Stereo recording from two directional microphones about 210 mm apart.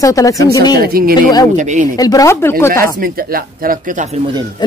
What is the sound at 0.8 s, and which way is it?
Speech, 45° right (ahead or behind).